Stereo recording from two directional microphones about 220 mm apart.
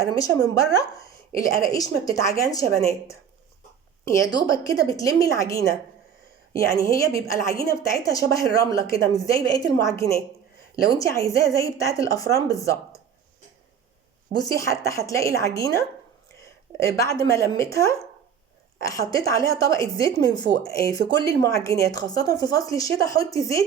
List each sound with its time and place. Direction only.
0.0 s a woman's voice: 15° left (ahead or behind)
6.7 s a woman's voice: 15° left (ahead or behind)
14.3 s a woman's voice: 15° left (ahead or behind)
17.0 s a woman's voice: 15° left (ahead or behind)